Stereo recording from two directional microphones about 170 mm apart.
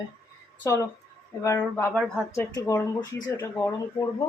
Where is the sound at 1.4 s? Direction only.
15° left (ahead or behind).